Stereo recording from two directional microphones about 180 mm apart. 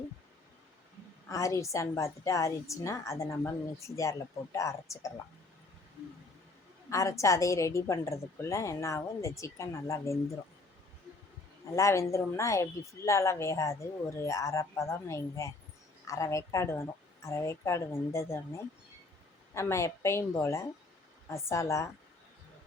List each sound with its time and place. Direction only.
1.3 s a woman's voice: 20° left (ahead or behind)
6.9 s a woman's voice: 15° left (ahead or behind)
11.6 s a woman's voice: 15° left (ahead or behind)